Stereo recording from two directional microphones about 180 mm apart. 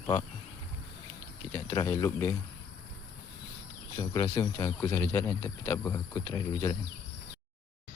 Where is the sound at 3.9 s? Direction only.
20° left (ahead or behind).